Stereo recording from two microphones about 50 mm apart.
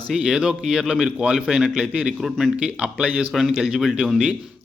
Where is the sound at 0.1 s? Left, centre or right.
Centre.